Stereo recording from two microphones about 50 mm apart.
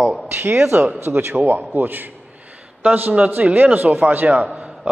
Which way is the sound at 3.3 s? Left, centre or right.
Right.